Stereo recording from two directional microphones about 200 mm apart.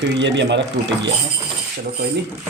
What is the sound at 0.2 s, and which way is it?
Speech, 65° right (ahead or behind).